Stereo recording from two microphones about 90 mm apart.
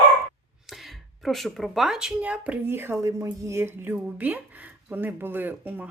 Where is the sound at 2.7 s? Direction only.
25° right (ahead or behind).